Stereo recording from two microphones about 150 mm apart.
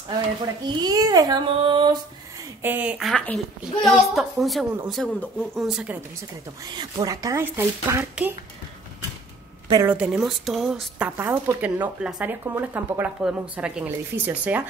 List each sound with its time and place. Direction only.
0.7 s speech: 25° right (ahead or behind)
2.6 s speech: 10° right (ahead or behind)
3.1 s speech: 5° left (ahead or behind)
6.6 s speech: 25° right (ahead or behind)
9.8 s speech: 10° right (ahead or behind)